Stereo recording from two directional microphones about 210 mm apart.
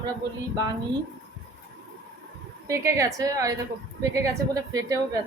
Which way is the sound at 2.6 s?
15° right (ahead or behind).